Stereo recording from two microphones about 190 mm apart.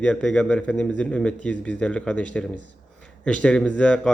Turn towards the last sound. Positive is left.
turn(degrees=5)  # may be behind; listen again after turning